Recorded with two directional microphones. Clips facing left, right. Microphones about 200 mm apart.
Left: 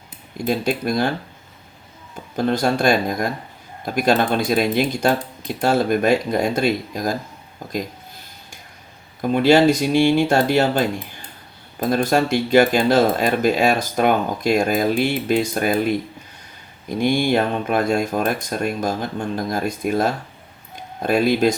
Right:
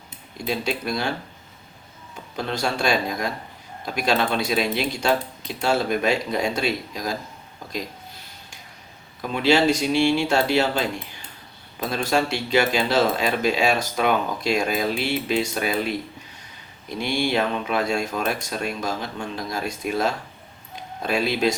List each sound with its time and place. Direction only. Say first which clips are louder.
0.4 s speech: left 5 dB; 50° left (ahead or behind)
2.3 s speech: left 7 dB; 50° left (ahead or behind)
9.2 s speech: left 5 dB; 50° left (ahead or behind)